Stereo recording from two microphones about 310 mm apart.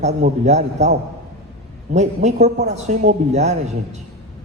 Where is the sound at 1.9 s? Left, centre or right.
Right.